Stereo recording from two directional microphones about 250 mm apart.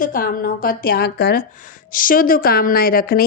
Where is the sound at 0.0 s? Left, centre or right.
Left.